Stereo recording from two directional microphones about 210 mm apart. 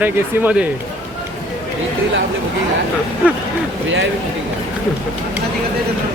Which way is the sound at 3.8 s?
65° right (ahead or behind).